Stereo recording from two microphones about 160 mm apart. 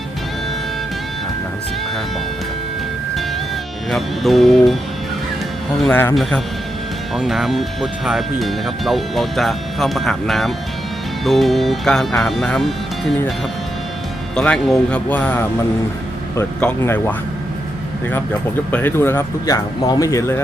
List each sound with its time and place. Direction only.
3.9 s speech: centre (ahead or behind)
5.9 s speech: 15° left (ahead or behind)
7.1 s speech: centre (ahead or behind)
14.3 s speech: 5° left (ahead or behind)
18.7 s speech: 10° left (ahead or behind)